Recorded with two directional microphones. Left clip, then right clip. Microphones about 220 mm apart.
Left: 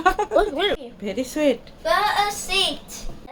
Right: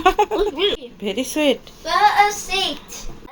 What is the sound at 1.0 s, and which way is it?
Speech, 10° right (ahead or behind).